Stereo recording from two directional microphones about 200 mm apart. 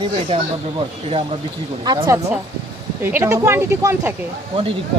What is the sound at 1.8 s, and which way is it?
Speech, 20° right (ahead or behind).